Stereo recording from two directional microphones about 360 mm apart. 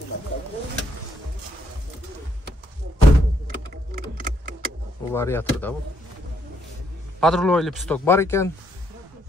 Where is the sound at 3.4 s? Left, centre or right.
Right.